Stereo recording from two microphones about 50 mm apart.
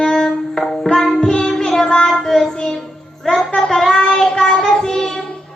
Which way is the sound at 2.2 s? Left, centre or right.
Centre.